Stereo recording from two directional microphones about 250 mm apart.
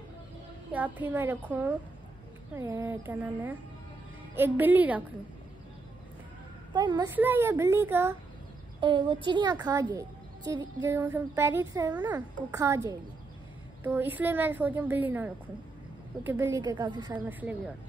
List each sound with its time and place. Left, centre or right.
0.7 s speech: centre
6.7 s speech: centre